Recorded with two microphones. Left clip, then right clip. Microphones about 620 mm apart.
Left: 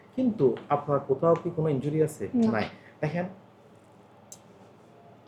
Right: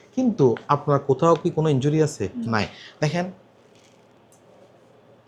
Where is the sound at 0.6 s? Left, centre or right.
Right.